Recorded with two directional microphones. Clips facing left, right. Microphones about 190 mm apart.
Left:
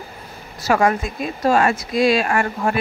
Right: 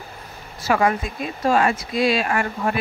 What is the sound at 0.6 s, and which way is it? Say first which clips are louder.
Speech: left 2 dB; 45° left (ahead or behind).